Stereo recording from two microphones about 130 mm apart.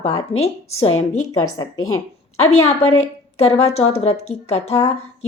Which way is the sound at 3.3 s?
50° left (ahead or behind).